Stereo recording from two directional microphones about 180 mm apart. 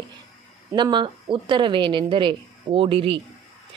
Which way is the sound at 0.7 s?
25° right (ahead or behind).